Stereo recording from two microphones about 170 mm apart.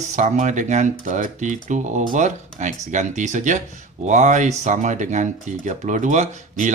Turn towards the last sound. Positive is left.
turn(degrees=-45)  # may be behind; listen again after turning